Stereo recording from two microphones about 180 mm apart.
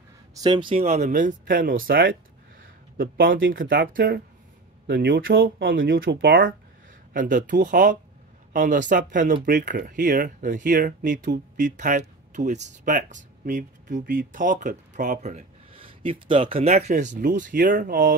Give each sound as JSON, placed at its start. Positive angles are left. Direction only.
{"t": 0.3, "sound": "speech", "side_deg": -20}
{"t": 4.8, "sound": "speech", "side_deg": -85}
{"t": 5.4, "sound": "speech", "side_deg": -55}
{"t": 5.8, "sound": "speech", "side_deg": -75}
{"t": 7.2, "sound": "speech", "side_deg": -45}